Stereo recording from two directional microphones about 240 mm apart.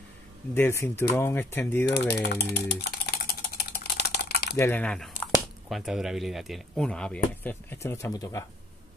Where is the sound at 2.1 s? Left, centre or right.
Left.